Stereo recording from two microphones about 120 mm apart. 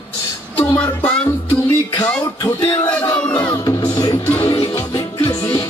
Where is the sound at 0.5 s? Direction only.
15° left (ahead or behind).